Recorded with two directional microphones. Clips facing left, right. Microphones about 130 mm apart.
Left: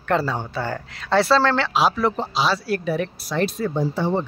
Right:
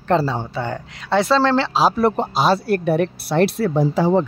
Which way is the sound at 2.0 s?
50° right (ahead or behind).